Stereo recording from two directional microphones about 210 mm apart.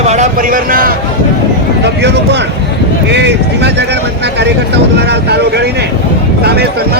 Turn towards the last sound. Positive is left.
turn(degrees=-50)  # may be behind; listen again after turning